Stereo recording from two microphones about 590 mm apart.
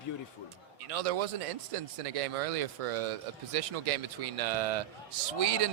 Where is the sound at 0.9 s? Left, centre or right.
Right.